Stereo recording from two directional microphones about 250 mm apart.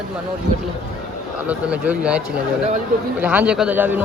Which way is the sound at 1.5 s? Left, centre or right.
Centre.